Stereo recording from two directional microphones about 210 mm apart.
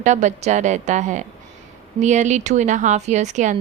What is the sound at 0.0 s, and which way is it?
A woman's voice, 35° right (ahead or behind).